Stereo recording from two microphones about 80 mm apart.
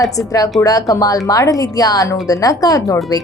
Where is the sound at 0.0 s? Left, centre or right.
Left.